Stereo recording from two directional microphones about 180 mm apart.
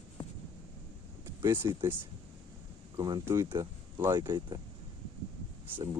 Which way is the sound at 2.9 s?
20° right (ahead or behind).